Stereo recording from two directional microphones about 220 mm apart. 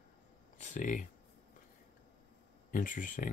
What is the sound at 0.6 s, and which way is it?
Speech, 35° left (ahead or behind).